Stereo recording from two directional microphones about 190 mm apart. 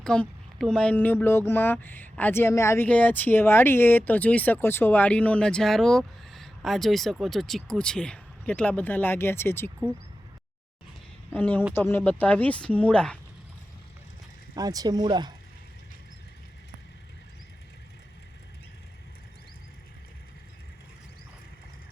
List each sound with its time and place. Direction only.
0.0 s speech: 5° left (ahead or behind)
11.3 s speech: 10° left (ahead or behind)
14.5 s speech: 20° right (ahead or behind)